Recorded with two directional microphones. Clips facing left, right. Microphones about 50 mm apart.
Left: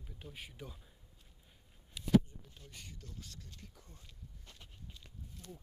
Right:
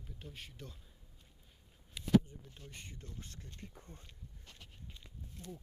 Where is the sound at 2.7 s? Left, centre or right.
Right.